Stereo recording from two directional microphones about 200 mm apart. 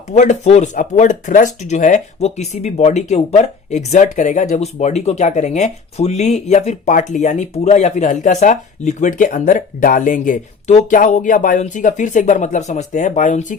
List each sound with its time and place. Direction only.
0.1 s speech: 35° left (ahead or behind)